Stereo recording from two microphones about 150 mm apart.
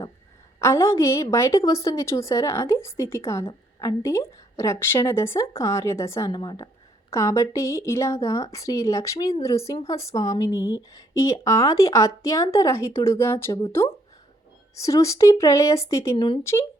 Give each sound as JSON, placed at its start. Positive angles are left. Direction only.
{"t": 0.6, "sound": "a woman's voice", "side_deg": 20}
{"t": 14.8, "sound": "a woman's voice", "side_deg": 20}